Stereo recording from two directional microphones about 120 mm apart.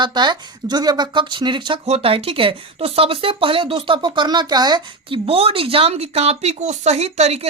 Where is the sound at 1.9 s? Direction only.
50° right (ahead or behind); by 4.8 s 35° right (ahead or behind).